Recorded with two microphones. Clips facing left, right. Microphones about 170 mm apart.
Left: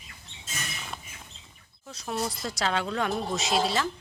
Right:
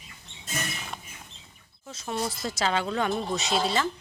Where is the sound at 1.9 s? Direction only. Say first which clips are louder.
Even; centre (ahead or behind).